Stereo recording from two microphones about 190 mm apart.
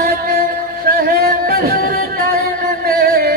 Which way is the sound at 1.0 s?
50° right (ahead or behind).